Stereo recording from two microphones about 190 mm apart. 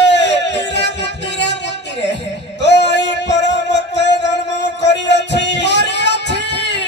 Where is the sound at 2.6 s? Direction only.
65° left (ahead or behind).